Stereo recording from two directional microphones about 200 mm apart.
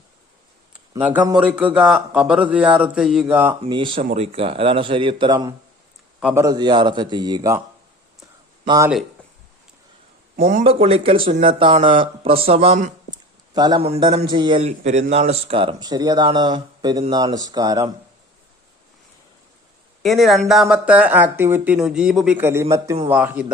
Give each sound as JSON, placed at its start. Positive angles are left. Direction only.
{"t": 0.7, "sound": "a sound", "side_deg": -5}
{"t": 1.4, "sound": "a man's voice", "side_deg": -5}
{"t": 3.6, "sound": "a man's voice", "side_deg": -25}
{"t": 6.1, "sound": "a man's voice", "side_deg": -5}
{"t": 6.4, "sound": "a man's voice", "side_deg": -20}
{"t": 8.6, "sound": "speech", "side_deg": -20}
{"t": 10.3, "sound": "speech", "side_deg": -45}
{"t": 10.7, "sound": "a man's voice", "side_deg": -30}
{"t": 13.5, "sound": "a man's voice", "side_deg": -20}
{"t": 20.0, "sound": "a man's voice", "side_deg": 0}